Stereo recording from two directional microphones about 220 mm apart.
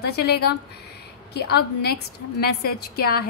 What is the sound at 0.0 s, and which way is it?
A woman's voice, 45° left (ahead or behind).